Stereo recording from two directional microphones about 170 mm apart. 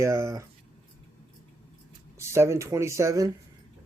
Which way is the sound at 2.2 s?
15° right (ahead or behind).